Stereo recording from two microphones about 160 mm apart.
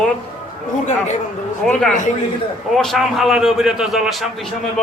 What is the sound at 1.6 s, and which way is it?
A man's voice, 5° left (ahead or behind).